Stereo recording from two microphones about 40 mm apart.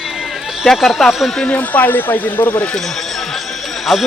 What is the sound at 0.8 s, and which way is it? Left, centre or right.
Speech, centre.